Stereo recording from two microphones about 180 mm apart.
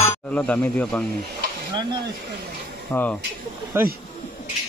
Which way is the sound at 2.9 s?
10° left (ahead or behind).